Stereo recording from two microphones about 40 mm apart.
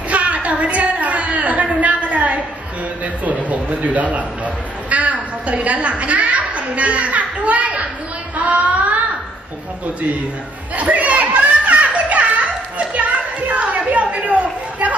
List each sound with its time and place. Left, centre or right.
0.1 s a sound: right
3.3 s a woman's voice: right
10.8 s children playing: right
12.7 s speech: right